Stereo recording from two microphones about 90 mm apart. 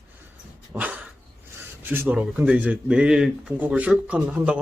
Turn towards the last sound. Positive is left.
turn(degrees=-15)  # may be behind; listen again after turning